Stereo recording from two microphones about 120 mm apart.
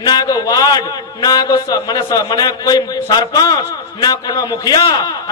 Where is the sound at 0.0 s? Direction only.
35° left (ahead or behind).